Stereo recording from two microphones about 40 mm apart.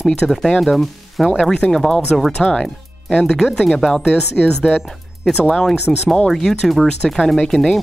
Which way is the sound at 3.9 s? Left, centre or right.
Centre.